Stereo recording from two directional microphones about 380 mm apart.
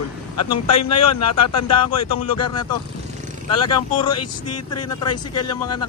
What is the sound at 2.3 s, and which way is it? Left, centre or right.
Speech, centre.